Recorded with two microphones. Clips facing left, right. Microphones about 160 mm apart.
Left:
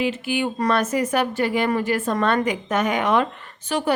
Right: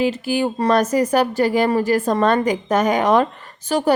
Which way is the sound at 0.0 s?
35° right (ahead or behind).